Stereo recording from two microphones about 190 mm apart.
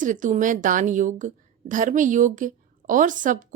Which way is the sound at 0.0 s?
45° right (ahead or behind).